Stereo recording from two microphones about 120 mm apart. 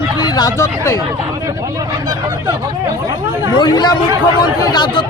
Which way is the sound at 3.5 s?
35° left (ahead or behind).